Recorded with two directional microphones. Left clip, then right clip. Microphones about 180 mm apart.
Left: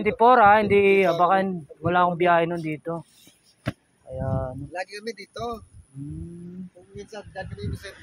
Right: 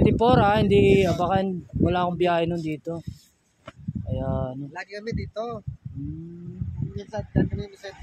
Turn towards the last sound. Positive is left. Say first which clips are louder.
# right 5 dB
turn(degrees=-25)  # may be behind; listen again after turning